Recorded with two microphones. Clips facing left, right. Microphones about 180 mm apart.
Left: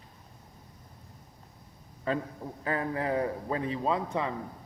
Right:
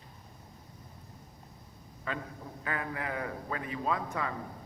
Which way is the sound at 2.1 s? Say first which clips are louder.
Left 7 dB; 35° left (ahead or behind).